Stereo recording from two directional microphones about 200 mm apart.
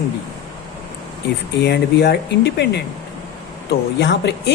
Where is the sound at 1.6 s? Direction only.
55° left (ahead or behind).